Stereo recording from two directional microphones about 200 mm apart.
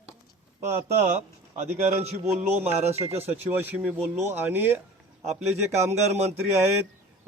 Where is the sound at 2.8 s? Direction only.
30° right (ahead or behind).